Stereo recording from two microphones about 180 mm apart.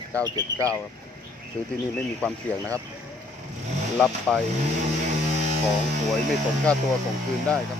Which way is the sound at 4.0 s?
Centre (ahead or behind).